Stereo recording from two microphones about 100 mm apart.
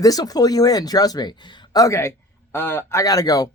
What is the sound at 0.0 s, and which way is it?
Speech, 40° left (ahead or behind).